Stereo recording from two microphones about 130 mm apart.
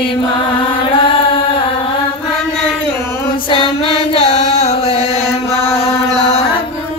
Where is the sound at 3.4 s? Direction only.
40° left (ahead or behind).